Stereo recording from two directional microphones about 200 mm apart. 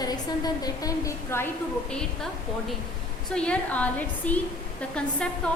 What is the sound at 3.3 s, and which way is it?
A woman's voice, 5° left (ahead or behind).